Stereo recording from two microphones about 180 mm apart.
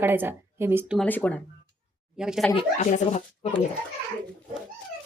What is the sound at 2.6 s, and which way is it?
Speech, 40° left (ahead or behind).